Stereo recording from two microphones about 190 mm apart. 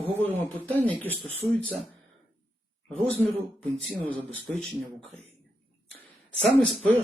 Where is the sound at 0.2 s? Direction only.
10° left (ahead or behind).